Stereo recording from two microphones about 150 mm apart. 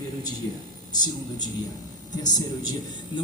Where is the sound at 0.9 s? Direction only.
25° left (ahead or behind).